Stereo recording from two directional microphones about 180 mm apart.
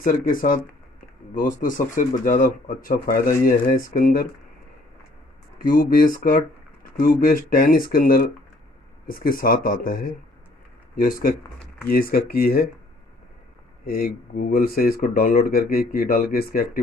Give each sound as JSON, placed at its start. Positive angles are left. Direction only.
{"t": 0.0, "sound": "speech", "side_deg": 50}
{"t": 5.6, "sound": "speech", "side_deg": 50}
{"t": 13.8, "sound": "speech", "side_deg": 55}